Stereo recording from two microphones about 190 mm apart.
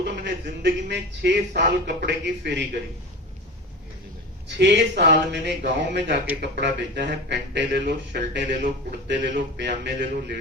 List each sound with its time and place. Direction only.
0.0 s speech: 60° right (ahead or behind)
4.4 s speech: 65° right (ahead or behind)